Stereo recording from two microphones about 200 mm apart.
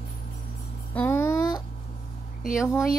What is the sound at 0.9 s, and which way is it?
Music, 10° left (ahead or behind).